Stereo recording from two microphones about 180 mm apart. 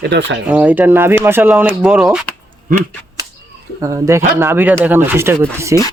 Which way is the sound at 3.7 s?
15° right (ahead or behind).